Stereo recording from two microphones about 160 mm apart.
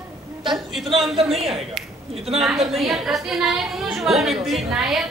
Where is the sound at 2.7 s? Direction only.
Centre (ahead or behind).